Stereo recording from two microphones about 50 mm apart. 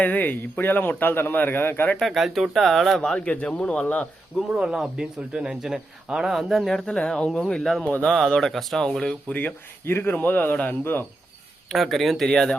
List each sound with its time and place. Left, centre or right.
0.0 s a man's voice: left
2.0 s speech: centre
3.2 s speech: left
4.5 s speech: centre
6.8 s speech: centre
7.9 s a man's voice: left
8.1 s speech: centre
9.8 s speech: left
10.2 s a man's voice: left
11.7 s speech: centre
12.3 s speech: centre